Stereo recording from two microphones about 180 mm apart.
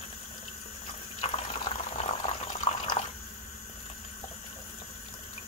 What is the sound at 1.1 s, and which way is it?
Boiling, 35° left (ahead or behind).